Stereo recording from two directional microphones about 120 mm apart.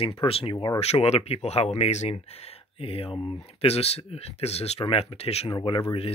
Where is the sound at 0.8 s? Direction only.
60° left (ahead or behind).